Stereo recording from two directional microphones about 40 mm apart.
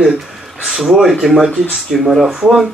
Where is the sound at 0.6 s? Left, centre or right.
Centre.